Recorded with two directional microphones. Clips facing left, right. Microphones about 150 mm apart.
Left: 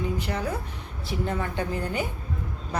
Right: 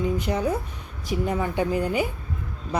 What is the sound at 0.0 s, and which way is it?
A woman's voice, 20° right (ahead or behind).